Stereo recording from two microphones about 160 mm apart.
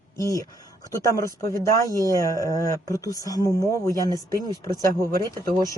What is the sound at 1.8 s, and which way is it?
Speech, 20° right (ahead or behind).